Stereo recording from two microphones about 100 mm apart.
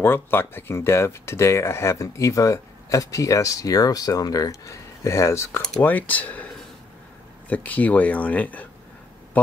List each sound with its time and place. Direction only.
0.0 s speech: 20° left (ahead or behind)
5.8 s speech: 15° left (ahead or behind)